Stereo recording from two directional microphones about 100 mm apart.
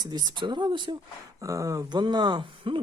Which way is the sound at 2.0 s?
45° right (ahead or behind).